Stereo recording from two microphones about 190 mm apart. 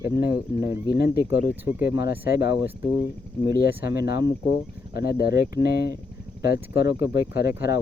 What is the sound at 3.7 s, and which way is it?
Speech, 15° right (ahead or behind).